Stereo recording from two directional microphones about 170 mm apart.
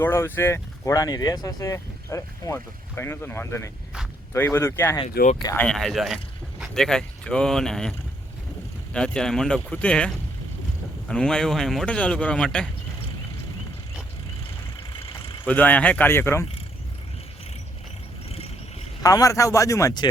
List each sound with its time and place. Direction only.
0.0 s speech: 15° left (ahead or behind)
5.5 s speech: 5° left (ahead or behind)
15.4 s speech: 10° left (ahead or behind)
18.3 s vehicle: 35° left (ahead or behind)
19.0 s speech: 20° left (ahead or behind)